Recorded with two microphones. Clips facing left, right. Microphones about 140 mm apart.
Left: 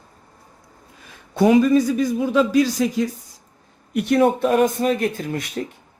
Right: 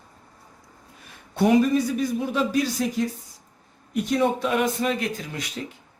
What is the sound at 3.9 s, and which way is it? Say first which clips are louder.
Speech: left 5 dB; 70° left (ahead or behind).